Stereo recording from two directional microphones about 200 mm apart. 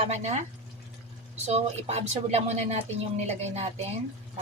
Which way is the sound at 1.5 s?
30° right (ahead or behind).